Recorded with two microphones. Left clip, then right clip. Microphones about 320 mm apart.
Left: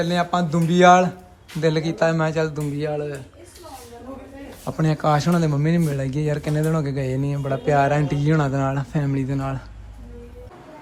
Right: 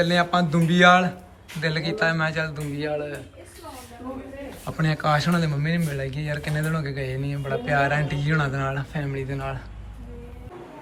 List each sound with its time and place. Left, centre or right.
0.1 s speech: centre
4.6 s speech: centre